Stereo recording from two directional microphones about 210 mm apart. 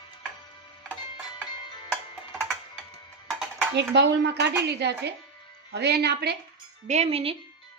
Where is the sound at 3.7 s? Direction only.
55° right (ahead or behind).